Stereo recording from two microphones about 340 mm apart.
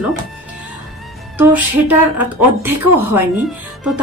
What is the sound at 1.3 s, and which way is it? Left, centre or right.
Speech, centre.